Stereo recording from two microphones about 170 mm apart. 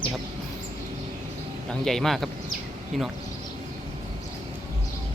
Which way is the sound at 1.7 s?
Centre (ahead or behind).